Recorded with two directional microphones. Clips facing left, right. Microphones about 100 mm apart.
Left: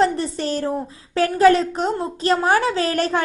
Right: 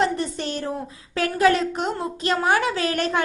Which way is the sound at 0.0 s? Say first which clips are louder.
Left 4 dB; 35° left (ahead or behind).